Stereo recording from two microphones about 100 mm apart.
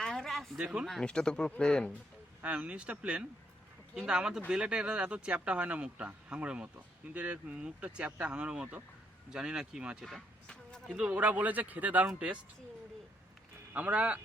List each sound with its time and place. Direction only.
0.0 s a sound: 5° left (ahead or behind)
0.9 s speech: 5° left (ahead or behind)
2.4 s speech: 15° right (ahead or behind)
10.1 s a sound: 5° left (ahead or behind)
10.8 s speech: 5° right (ahead or behind)
13.7 s speech: 15° right (ahead or behind)